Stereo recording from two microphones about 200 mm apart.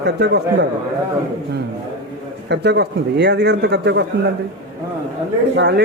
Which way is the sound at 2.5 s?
55° right (ahead or behind).